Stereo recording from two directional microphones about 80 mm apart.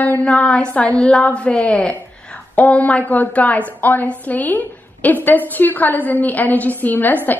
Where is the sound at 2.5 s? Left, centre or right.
Centre.